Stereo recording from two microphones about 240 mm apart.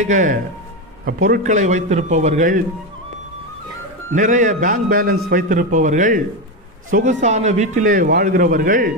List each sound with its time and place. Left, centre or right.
0.0 s a man's voice: right
4.1 s a man's voice: right